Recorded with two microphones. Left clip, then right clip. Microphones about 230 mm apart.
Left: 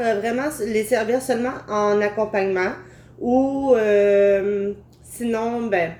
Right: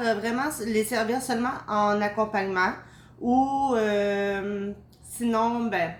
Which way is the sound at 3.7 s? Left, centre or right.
Centre.